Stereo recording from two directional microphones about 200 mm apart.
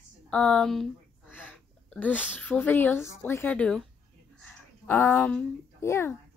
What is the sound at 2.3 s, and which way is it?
A child's voice, 10° left (ahead or behind).